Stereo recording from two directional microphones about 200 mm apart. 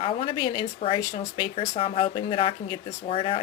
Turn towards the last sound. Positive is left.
turn(degrees=25)  # may be behind; listen again after turning